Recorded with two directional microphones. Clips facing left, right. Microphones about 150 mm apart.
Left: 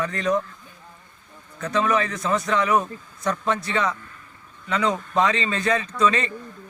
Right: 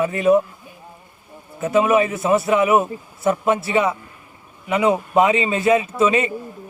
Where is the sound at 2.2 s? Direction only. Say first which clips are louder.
Right 6 dB; 25° right (ahead or behind).